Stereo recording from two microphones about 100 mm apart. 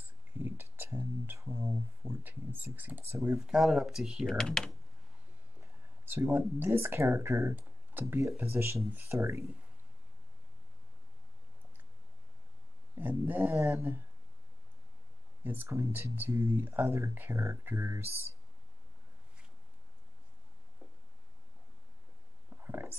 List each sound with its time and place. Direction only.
0.0 s a sound: 20° right (ahead or behind)
3.3 s speech: 5° right (ahead or behind)
4.3 s speech: 5° left (ahead or behind)
6.0 s speech: 25° right (ahead or behind)
7.5 s tick-tock: 20° right (ahead or behind)
8.4 s speech: 25° right (ahead or behind)
12.9 s speech: 15° right (ahead or behind)
15.4 s speech: 20° right (ahead or behind)
22.6 s a sound: 20° right (ahead or behind)